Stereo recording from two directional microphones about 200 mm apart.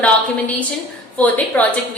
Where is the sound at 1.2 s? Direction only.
10° left (ahead or behind).